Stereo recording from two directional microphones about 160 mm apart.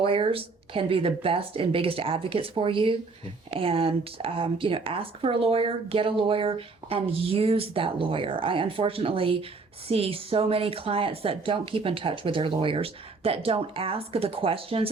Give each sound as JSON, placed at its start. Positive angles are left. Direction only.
{"t": 0.0, "sound": "speech", "side_deg": -35}